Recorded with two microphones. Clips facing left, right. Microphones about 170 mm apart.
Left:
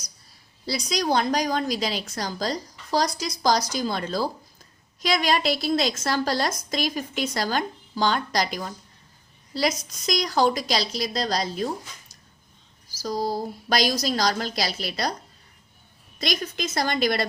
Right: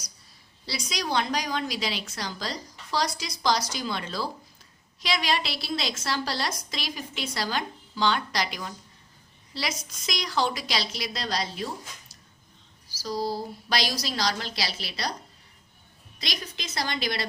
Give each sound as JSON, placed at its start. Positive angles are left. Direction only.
{"t": 0.6, "sound": "a woman's voice", "side_deg": 40}
{"t": 13.0, "sound": "a woman's voice", "side_deg": 45}
{"t": 16.1, "sound": "a woman's voice", "side_deg": 50}